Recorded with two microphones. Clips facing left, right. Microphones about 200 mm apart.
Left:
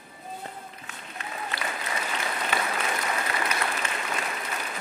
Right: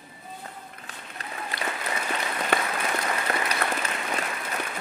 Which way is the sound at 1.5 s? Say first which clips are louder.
Right 2 dB; 35° right (ahead or behind).